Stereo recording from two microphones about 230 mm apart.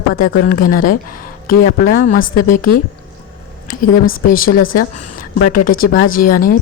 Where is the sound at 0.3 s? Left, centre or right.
Left.